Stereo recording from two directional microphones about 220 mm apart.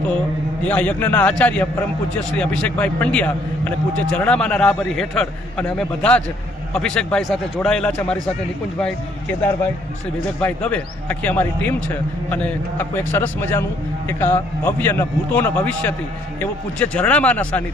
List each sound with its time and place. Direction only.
0.6 s a man's voice: 5° left (ahead or behind)
10.4 s a man's voice: 5° left (ahead or behind)